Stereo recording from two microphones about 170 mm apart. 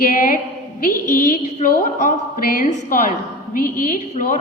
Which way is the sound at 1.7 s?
50° left (ahead or behind).